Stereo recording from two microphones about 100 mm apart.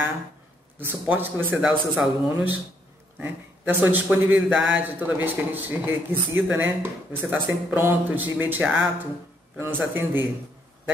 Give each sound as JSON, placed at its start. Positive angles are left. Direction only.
{"t": 0.7, "sound": "speech", "side_deg": -20}